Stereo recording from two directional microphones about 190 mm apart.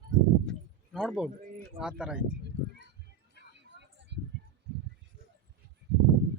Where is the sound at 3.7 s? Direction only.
65° right (ahead or behind).